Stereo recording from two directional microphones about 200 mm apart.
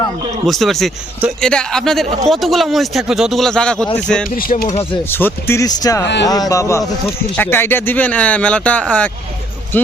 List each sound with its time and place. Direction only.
0.4 s a man's voice: centre (ahead or behind)
4.4 s speech: 45° left (ahead or behind)
5.1 s speech: 10° left (ahead or behind)